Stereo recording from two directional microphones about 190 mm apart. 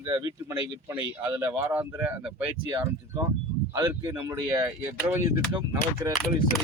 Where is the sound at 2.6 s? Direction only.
20° right (ahead or behind).